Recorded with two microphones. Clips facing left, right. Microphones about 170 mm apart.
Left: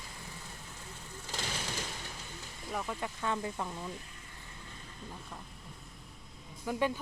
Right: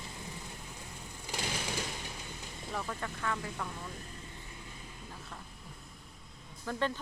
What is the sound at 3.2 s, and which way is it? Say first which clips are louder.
Speech: left 3 dB; 20° left (ahead or behind).